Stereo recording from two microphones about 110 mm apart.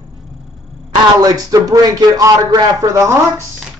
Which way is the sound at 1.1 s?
35° right (ahead or behind).